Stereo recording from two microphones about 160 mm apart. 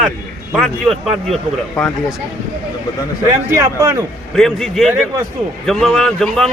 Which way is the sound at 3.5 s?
20° right (ahead or behind).